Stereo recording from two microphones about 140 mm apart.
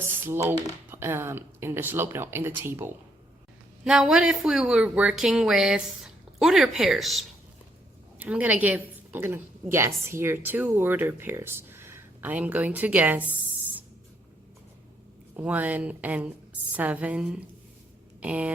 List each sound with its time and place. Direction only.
0.3 s a woman's voice: 20° right (ahead or behind)
3.8 s a woman's voice: 5° right (ahead or behind)
15.4 s a woman's voice: 10° right (ahead or behind)